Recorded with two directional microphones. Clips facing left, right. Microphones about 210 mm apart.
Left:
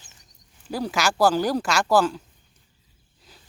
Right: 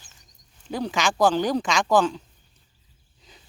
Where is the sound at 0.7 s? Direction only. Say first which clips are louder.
Even; 5° left (ahead or behind).